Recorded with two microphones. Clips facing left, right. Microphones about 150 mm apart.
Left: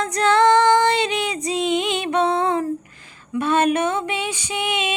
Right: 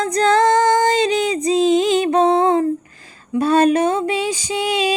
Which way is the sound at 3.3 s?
35° right (ahead or behind).